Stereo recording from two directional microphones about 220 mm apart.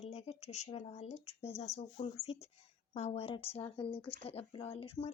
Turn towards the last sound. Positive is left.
turn(degrees=25)  # may be behind; listen again after turning